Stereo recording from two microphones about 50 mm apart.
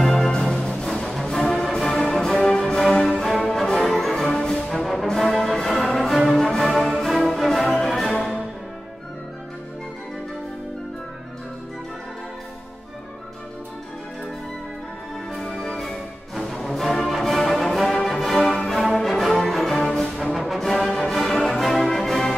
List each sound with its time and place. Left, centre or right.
0.0 s music: centre
15.3 s music: centre
20.3 s music: centre